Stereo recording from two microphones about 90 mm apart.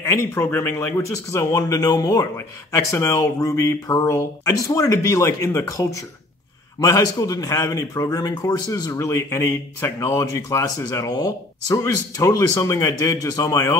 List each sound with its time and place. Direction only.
0.0 s speech: 35° left (ahead or behind)
8.9 s speech: 30° left (ahead or behind)